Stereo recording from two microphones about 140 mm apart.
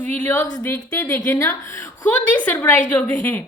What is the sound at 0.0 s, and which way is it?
A woman's voice, 15° left (ahead or behind).